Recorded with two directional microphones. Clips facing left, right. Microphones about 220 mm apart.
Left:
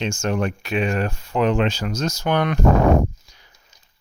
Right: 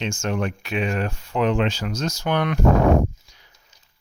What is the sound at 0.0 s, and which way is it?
Speech, 40° left (ahead or behind).